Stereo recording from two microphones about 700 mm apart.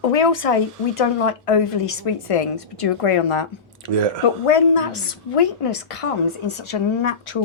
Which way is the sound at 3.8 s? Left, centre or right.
Right.